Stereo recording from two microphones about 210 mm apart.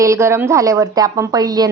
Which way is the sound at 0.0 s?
15° right (ahead or behind).